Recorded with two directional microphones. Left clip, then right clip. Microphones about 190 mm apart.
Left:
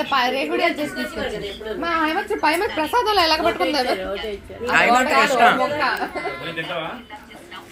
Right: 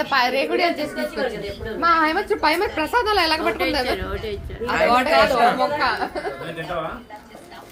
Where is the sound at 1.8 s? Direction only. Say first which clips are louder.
Right 4 dB; 20° left (ahead or behind).